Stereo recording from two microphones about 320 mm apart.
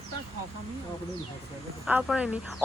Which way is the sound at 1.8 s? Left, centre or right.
Centre.